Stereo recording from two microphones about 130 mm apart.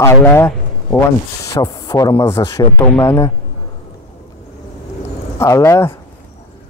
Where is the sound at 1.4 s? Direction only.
25° left (ahead or behind).